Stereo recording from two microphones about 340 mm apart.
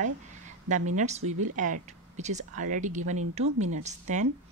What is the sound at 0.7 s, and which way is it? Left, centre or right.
Speech, right.